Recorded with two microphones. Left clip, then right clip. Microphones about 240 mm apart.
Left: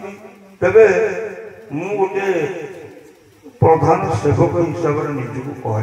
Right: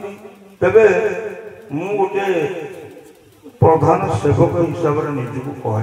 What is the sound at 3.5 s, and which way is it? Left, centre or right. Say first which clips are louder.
A man's voice: even; right.